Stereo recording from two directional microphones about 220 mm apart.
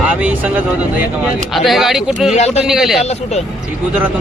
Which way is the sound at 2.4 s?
30° left (ahead or behind).